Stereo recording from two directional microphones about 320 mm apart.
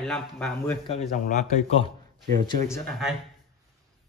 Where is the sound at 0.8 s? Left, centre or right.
Left.